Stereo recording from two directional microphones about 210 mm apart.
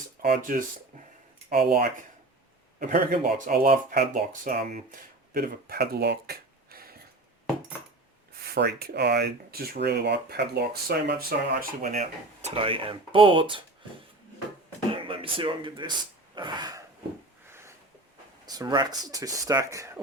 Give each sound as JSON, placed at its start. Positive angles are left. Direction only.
{"t": 0.2, "sound": "speech", "side_deg": -40}
{"t": 8.5, "sound": "speech", "side_deg": -50}
{"t": 14.8, "sound": "a sound", "side_deg": -25}
{"t": 18.4, "sound": "speech", "side_deg": -20}